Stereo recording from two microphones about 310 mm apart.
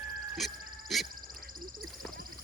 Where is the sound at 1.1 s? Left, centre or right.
Right.